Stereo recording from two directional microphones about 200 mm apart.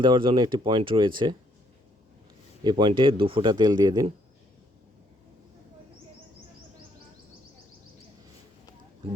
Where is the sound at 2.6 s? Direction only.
20° right (ahead or behind).